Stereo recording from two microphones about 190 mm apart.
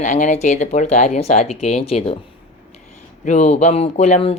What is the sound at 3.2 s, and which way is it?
A woman's voice, 40° left (ahead or behind).